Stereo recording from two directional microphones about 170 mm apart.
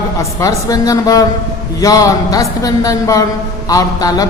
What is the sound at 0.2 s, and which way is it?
A man's voice, 20° left (ahead or behind).